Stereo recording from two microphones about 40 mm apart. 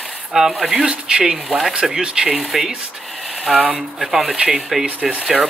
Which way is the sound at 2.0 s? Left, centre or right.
Right.